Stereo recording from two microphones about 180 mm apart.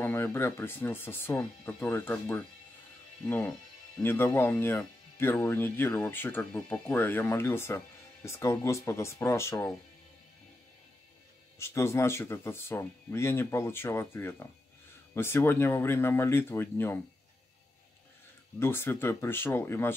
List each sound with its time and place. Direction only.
0.0 s speech: 10° left (ahead or behind)
11.5 s speech: 15° left (ahead or behind)
18.6 s speech: 15° left (ahead or behind)